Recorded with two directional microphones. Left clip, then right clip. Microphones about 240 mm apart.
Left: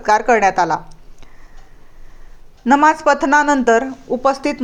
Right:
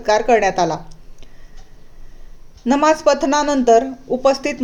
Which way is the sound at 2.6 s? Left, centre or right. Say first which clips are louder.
Left 2 dB; centre.